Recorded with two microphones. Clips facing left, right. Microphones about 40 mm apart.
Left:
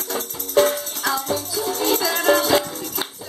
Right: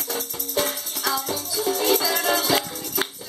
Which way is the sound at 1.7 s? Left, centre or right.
Left.